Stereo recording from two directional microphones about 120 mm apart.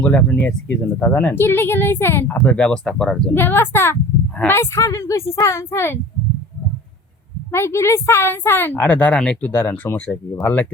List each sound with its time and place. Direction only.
0.0 s speech: 10° left (ahead or behind)
3.3 s speech: 20° left (ahead or behind)
7.5 s speech: 20° left (ahead or behind)